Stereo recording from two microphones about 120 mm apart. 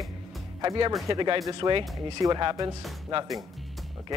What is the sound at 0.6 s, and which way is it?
Speech, 35° right (ahead or behind).